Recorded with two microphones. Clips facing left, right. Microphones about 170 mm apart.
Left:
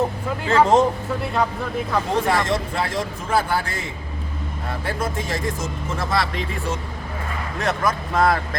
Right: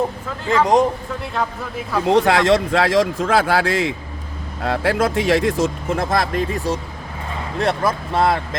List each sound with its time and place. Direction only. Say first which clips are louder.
0.6 s speech: even; 15° right (ahead or behind)
1.2 s speech: left 2 dB; centre (ahead or behind)
2.1 s speech: right 8 dB; 80° right; by 6.4 s 50° right (ahead or behind)
6.7 s speech: right 4 dB; 35° right (ahead or behind)